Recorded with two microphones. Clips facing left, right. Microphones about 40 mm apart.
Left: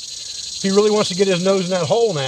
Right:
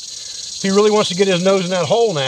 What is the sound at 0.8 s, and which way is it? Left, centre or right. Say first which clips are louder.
Speech: right 3 dB; right.